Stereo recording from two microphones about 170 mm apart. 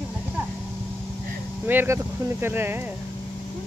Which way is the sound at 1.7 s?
10° right (ahead or behind).